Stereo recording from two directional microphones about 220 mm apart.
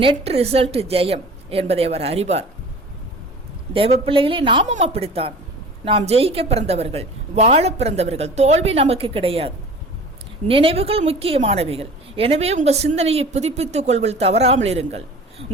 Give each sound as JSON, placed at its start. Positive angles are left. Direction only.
{"t": 0.0, "sound": "a woman's voice", "side_deg": -25}
{"t": 3.7, "sound": "a woman's voice", "side_deg": -25}
{"t": 10.5, "sound": "a woman's voice", "side_deg": -25}